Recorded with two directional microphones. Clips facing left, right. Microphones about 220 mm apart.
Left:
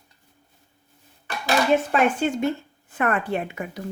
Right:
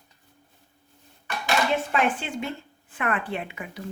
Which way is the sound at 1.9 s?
45° left (ahead or behind).